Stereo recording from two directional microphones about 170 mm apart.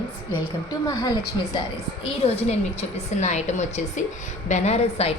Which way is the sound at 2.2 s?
35° left (ahead or behind).